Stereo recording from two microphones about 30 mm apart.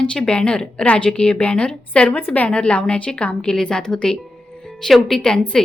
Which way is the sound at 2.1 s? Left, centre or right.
Left.